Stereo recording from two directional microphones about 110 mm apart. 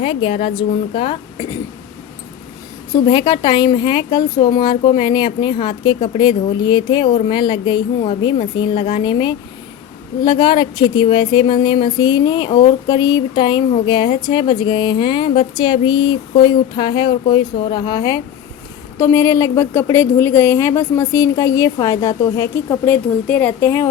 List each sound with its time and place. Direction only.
0.0 s a woman's voice: 50° left (ahead or behind)
2.9 s a woman's voice: 40° left (ahead or behind)
18.9 s a woman's voice: 25° left (ahead or behind)